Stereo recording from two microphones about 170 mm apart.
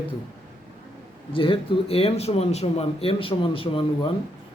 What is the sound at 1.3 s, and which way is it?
Speech, 30° left (ahead or behind).